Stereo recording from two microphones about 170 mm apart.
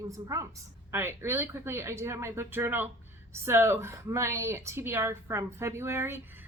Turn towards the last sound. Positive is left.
turn(degrees=-15)  # may be behind; listen again after turning